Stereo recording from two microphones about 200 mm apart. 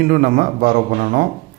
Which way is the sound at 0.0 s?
45° right (ahead or behind).